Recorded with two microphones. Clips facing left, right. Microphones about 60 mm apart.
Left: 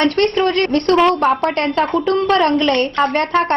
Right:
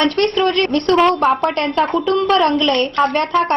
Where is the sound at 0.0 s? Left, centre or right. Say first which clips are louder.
Left 1 dB; left.